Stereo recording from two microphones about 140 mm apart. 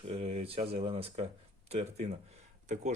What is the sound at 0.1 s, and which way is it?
Speech, 50° right (ahead or behind).